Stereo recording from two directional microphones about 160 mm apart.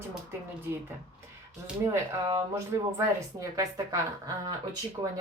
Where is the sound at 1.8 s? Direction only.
15° right (ahead or behind).